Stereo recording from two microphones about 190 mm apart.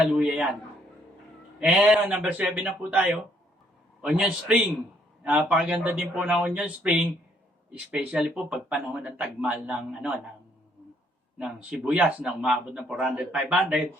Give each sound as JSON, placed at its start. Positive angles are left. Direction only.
{"t": 0.0, "sound": "a man's voice", "side_deg": -5}
{"t": 1.5, "sound": "a man's voice", "side_deg": -5}
{"t": 11.3, "sound": "speech", "side_deg": -5}